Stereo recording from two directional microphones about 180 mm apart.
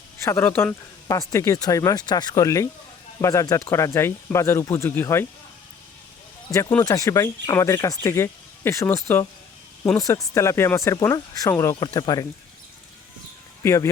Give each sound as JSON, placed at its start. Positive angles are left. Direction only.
{"t": 0.3, "sound": "speech", "side_deg": 10}
{"t": 6.5, "sound": "speech", "side_deg": 15}
{"t": 13.6, "sound": "speech", "side_deg": 15}